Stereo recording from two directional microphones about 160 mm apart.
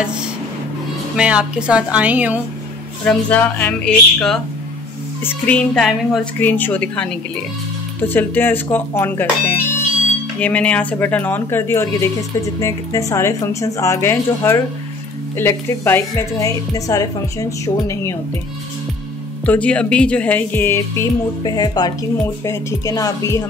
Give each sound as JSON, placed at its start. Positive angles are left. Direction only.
{"t": 1.1, "sound": "speech", "side_deg": -5}
{"t": 3.1, "sound": "a woman's voice", "side_deg": 10}
{"t": 19.4, "sound": "a woman's voice", "side_deg": 10}